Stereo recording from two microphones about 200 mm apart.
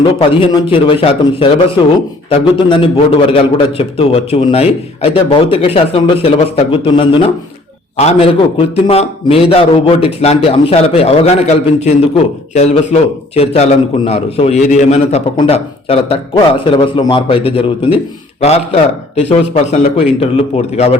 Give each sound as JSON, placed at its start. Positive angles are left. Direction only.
{"t": 0.0, "sound": "a man's voice", "side_deg": 25}